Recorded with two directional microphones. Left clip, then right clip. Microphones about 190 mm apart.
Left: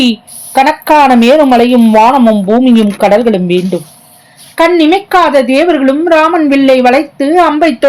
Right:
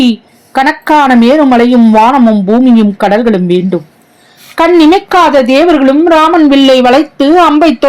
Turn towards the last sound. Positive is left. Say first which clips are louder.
# right 1 dB
turn(degrees=-20)  # may be behind; listen again after turning